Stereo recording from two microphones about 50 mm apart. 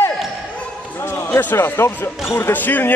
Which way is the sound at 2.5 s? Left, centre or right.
Left.